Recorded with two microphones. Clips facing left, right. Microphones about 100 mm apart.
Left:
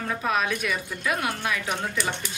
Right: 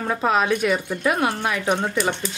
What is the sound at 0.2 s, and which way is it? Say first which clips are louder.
A woman's voice: right 7 dB; 30° right (ahead or behind).